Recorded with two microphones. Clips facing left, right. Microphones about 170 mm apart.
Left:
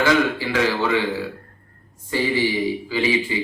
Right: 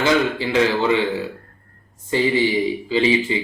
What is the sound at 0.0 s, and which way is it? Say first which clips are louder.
Speech: even; 20° right (ahead or behind).